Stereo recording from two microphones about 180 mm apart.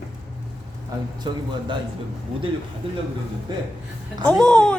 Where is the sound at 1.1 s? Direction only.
25° right (ahead or behind).